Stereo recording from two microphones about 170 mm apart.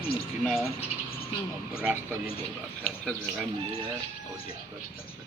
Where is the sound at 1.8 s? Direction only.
5° right (ahead or behind).